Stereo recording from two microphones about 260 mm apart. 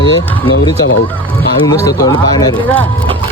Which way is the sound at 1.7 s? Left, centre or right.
Centre.